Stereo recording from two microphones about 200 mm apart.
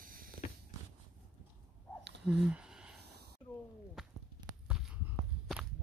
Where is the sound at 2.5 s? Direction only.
5° right (ahead or behind).